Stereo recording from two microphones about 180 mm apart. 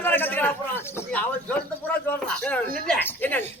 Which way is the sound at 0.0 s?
10° left (ahead or behind).